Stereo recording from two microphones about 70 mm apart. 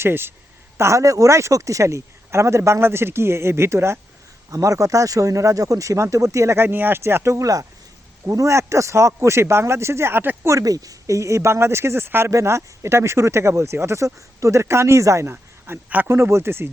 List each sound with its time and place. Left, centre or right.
0.0 s speech: right
0.8 s speech: right
4.5 s speech: right
6.7 s speech: right
10.5 s speech: right
12.3 s speech: right